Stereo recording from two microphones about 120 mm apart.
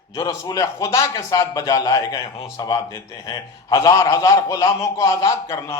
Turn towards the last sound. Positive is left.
turn(degrees=25)  # may be behind; listen again after turning